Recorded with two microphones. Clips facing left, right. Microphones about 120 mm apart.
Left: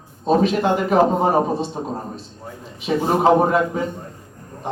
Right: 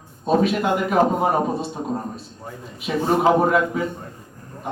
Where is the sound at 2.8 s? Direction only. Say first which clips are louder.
Left 2 dB; 30° left (ahead or behind).